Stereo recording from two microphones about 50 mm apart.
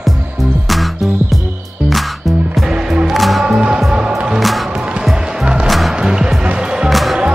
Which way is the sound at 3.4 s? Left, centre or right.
Centre.